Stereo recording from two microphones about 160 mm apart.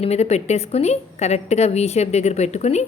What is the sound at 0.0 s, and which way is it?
A woman's voice, 40° left (ahead or behind).